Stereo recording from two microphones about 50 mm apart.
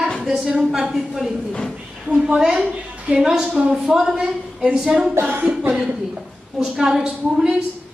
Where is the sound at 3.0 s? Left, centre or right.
Right.